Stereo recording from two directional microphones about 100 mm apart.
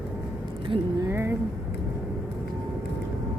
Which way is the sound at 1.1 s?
25° right (ahead or behind).